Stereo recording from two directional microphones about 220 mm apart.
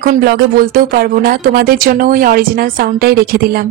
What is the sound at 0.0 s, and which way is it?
Speech, 45° right (ahead or behind).